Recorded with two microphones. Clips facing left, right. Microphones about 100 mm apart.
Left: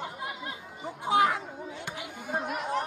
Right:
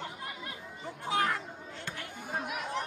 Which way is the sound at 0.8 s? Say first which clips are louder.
Left 6 dB; 15° left (ahead or behind).